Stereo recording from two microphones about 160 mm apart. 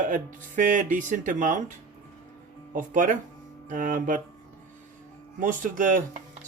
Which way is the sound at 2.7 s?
55° right (ahead or behind).